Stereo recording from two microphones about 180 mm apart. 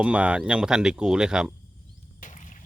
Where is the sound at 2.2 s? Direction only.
40° left (ahead or behind).